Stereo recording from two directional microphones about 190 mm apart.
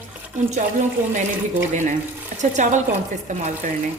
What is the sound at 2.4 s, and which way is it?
Speech, 40° right (ahead or behind).